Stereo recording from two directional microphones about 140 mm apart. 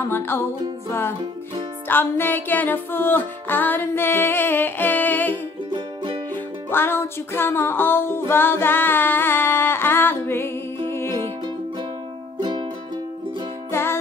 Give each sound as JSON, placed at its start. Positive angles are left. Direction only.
{"t": 0.1, "sound": "music", "side_deg": 15}
{"t": 1.9, "sound": "music", "side_deg": 15}
{"t": 5.7, "sound": "music", "side_deg": -35}
{"t": 6.3, "sound": "music", "side_deg": 15}
{"t": 12.4, "sound": "music", "side_deg": -30}
{"t": 13.7, "sound": "music", "side_deg": 15}